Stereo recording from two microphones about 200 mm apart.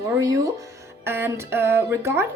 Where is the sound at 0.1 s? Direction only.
15° right (ahead or behind).